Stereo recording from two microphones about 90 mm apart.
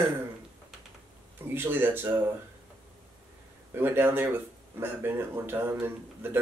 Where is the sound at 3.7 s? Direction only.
25° right (ahead or behind).